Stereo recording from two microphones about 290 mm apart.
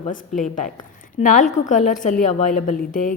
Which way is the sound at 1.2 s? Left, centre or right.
Left.